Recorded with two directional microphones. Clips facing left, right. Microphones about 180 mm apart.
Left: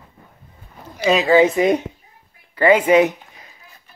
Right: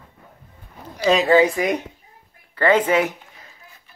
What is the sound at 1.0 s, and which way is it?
Speech, 5° left (ahead or behind).